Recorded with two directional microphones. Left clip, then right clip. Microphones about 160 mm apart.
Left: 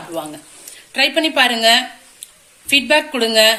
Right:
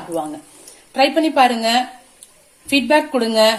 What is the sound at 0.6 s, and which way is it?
Speech, 40° right (ahead or behind).